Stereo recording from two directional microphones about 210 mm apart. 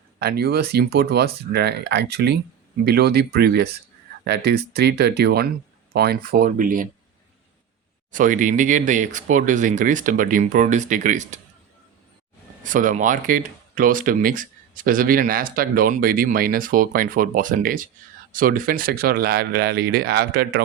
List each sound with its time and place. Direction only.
0.2 s speech: 50° right (ahead or behind)
8.1 s speech: 40° right (ahead or behind)
12.6 s speech: 40° right (ahead or behind)